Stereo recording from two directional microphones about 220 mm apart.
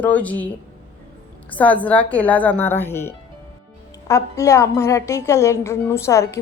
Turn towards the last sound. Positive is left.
turn(degrees=15)  # may be behind; listen again after turning